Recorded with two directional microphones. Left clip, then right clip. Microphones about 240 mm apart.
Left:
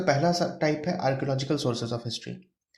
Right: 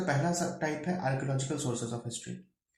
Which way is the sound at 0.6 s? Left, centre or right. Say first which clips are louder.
Left 7 dB; left.